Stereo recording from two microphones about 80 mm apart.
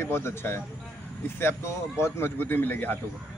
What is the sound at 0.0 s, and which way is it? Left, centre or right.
A man's voice, left.